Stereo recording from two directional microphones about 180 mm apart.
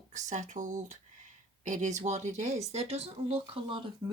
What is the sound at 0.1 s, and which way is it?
Speech, 45° right (ahead or behind).